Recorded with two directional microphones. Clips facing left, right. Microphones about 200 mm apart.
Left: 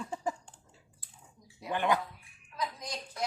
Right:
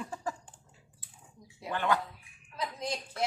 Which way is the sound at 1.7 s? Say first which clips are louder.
Left 1 dB; 15° left (ahead or behind).